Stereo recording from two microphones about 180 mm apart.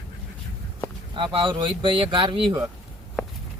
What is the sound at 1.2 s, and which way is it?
Speech, 30° right (ahead or behind).